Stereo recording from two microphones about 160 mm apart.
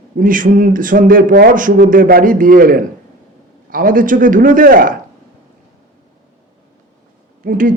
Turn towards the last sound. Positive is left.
turn(degrees=-60)  # may be behind; listen again after turning